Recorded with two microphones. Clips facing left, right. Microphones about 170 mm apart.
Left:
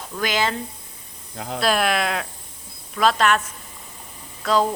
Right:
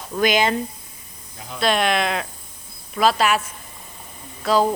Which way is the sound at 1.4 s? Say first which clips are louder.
Left 7 dB; 80° left.